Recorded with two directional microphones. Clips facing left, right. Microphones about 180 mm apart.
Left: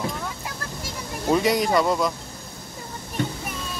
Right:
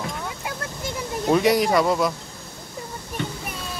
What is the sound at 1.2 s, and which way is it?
Speech, 5° right (ahead or behind).